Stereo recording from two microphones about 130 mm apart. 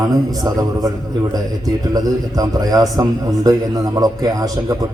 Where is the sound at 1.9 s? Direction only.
30° right (ahead or behind).